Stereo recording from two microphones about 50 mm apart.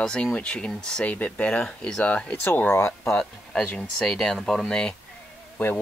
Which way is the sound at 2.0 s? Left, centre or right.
Left.